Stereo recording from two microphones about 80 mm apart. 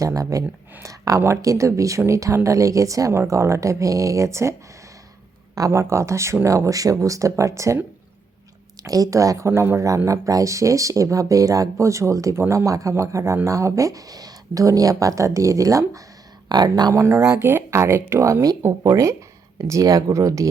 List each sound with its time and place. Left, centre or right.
0.0 s speech: right
5.5 s speech: right
8.9 s speech: right
16.5 s speech: right
16.9 s speech: right